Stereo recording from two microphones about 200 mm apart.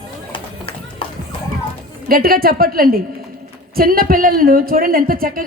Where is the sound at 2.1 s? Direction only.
45° right (ahead or behind).